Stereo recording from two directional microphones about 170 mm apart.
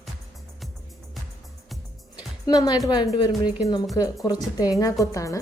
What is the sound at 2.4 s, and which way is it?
Speech, 20° left (ahead or behind).